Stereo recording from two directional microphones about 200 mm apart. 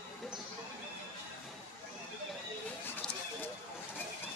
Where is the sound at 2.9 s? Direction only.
10° left (ahead or behind).